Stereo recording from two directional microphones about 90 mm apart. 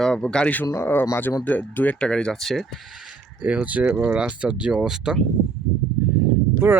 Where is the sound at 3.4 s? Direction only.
15° right (ahead or behind).